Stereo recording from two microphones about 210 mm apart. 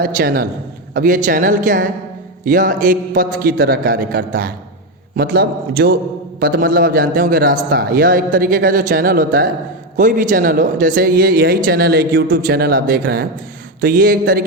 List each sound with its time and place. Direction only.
0.0 s a man's voice: 45° right (ahead or behind)